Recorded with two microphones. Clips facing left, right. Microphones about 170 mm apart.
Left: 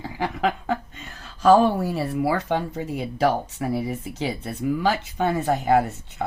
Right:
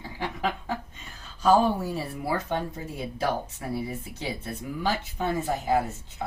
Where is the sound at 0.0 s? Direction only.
75° left (ahead or behind).